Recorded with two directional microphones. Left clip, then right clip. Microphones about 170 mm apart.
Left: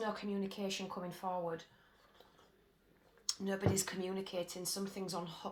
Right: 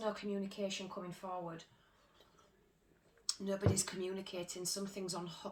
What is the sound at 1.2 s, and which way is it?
Speech, 30° left (ahead or behind).